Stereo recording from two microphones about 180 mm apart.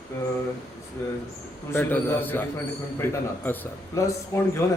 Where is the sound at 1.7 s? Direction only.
15° left (ahead or behind).